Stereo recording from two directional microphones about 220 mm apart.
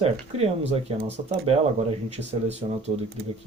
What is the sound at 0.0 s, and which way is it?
Speech, 30° right (ahead or behind).